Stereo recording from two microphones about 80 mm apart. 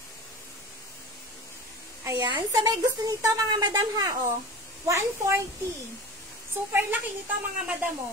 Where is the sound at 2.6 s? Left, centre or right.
Right.